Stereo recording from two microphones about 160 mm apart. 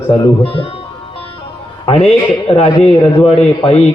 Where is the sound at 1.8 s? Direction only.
40° left (ahead or behind).